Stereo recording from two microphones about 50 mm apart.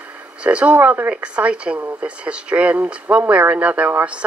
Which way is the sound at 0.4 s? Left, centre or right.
Right.